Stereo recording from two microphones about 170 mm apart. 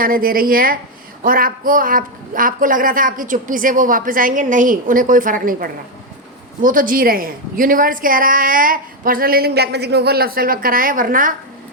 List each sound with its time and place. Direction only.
0.0 s a woman's voice: 55° right (ahead or behind)